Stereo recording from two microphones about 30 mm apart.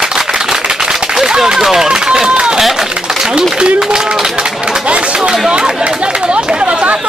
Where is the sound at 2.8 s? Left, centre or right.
Centre.